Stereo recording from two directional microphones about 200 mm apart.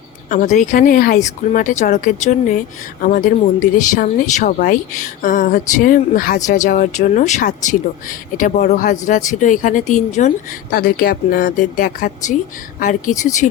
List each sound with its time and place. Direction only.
0.3 s speech: 40° left (ahead or behind)